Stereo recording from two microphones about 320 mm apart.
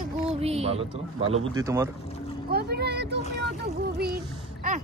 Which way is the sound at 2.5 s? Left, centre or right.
Right.